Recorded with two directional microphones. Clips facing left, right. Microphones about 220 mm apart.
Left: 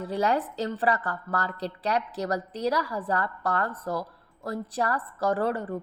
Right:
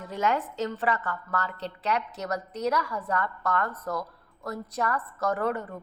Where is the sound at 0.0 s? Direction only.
35° left (ahead or behind).